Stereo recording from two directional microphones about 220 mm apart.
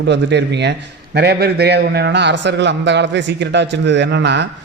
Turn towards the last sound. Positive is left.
turn(degrees=-55)  # may be behind; listen again after turning